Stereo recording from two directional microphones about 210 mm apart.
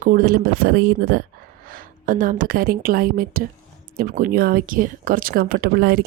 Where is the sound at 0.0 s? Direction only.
45° right (ahead or behind).